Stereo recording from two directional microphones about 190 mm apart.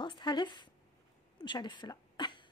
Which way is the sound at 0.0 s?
25° left (ahead or behind).